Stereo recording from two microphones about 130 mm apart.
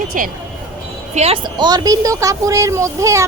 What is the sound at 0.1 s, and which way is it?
Speech, 90° right.